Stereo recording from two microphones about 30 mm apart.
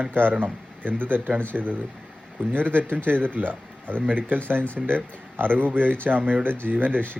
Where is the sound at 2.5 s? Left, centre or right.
Right.